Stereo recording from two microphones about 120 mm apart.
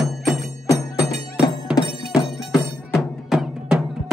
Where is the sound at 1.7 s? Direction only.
10° right (ahead or behind).